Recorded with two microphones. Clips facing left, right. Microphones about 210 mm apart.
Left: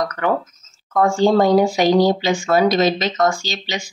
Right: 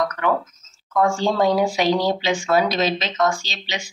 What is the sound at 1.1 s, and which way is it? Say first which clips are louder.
Speech: left 5 dB; 45° left (ahead or behind).